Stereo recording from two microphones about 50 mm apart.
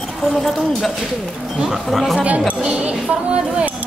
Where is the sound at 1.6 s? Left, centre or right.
Centre.